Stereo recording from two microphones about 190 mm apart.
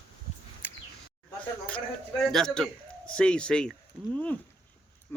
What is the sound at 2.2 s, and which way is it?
Speech, centre (ahead or behind).